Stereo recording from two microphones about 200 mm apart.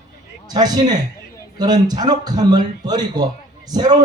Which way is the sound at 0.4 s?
20° right (ahead or behind).